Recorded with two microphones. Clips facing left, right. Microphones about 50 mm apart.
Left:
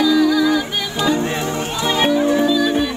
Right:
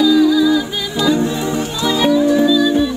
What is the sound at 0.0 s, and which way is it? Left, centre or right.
Music, left.